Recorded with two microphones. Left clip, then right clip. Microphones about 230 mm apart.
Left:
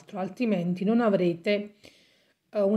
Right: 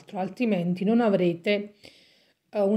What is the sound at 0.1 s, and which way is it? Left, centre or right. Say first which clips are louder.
A woman's voice: right 2 dB; centre.